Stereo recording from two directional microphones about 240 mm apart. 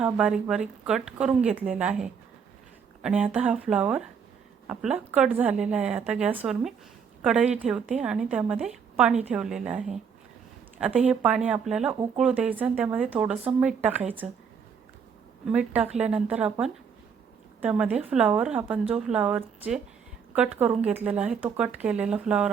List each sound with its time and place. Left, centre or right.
0.0 s speech: centre
15.4 s speech: centre